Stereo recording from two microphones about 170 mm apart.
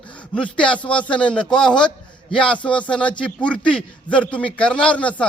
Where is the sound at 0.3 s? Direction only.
5° left (ahead or behind).